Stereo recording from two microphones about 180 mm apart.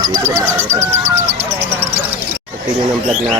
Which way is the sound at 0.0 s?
20° right (ahead or behind).